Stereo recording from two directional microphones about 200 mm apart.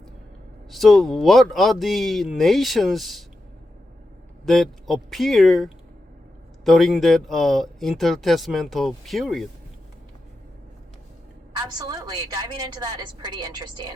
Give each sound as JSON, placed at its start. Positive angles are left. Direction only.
{"t": 0.7, "sound": "speech", "side_deg": 0}
{"t": 4.4, "sound": "speech", "side_deg": 0}
{"t": 11.5, "sound": "a woman's voice", "side_deg": -20}